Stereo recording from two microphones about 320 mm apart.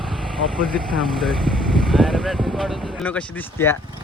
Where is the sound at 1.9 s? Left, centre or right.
Centre.